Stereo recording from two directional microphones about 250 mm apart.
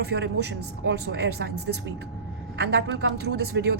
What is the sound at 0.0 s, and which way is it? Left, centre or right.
A woman's voice, right.